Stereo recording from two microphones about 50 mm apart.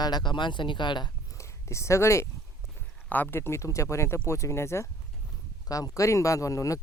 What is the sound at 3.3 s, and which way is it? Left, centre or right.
Speech, left.